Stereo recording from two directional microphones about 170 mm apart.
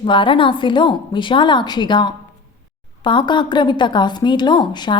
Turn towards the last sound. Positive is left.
turn(degrees=25)  # may be behind; listen again after turning